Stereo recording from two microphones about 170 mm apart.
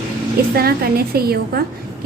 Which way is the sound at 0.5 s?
65° right (ahead or behind).